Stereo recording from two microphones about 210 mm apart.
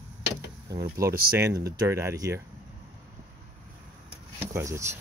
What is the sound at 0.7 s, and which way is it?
Speech, 15° right (ahead or behind).